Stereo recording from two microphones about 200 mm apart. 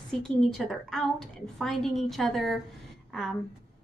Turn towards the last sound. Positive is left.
turn(degrees=0)  # may be behind; listen again after turning